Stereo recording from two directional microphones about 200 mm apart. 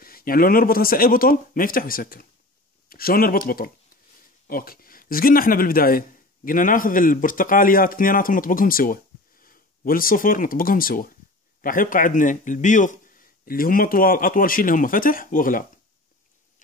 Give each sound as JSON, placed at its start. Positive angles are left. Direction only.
{"t": 0.0, "sound": "a man's voice", "side_deg": 45}